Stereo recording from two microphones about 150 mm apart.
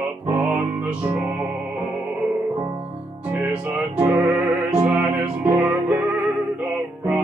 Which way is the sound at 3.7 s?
10° right (ahead or behind).